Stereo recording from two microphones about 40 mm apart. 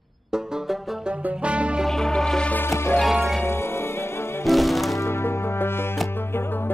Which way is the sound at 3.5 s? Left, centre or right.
Left.